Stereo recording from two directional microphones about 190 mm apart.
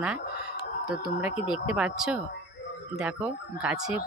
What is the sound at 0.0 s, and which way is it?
Chicken, 5° right (ahead or behind).